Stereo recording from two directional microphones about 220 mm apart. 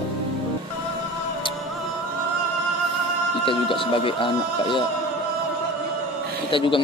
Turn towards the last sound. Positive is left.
turn(degrees=25)  # may be behind; listen again after turning